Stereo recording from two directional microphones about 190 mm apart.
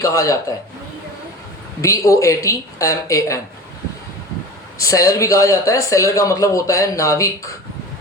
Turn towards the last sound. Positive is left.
turn(degrees=15)  # may be behind; listen again after turning